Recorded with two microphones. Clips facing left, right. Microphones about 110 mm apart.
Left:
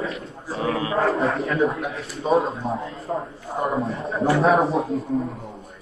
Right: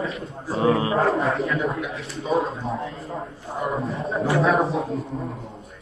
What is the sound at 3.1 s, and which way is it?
Speech, 40° left (ahead or behind).